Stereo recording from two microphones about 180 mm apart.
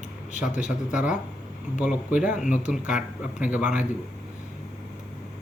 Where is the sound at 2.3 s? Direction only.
45° left (ahead or behind).